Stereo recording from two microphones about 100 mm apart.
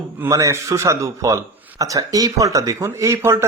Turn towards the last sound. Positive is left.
turn(degrees=-25)  # may be behind; listen again after turning